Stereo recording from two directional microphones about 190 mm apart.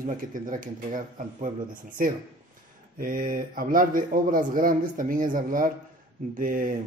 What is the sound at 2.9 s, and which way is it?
Speech, 45° right (ahead or behind).